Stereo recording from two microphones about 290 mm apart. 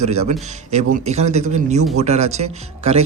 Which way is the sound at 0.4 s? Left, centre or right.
Right.